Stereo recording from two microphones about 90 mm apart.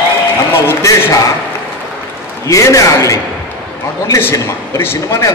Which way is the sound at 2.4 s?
40° left (ahead or behind).